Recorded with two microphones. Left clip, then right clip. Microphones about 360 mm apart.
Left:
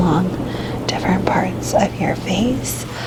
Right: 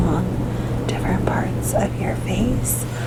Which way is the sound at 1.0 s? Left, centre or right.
Left.